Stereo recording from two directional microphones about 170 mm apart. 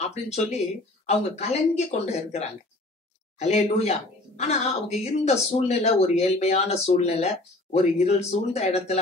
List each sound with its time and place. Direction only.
0.1 s speech: 40° left (ahead or behind)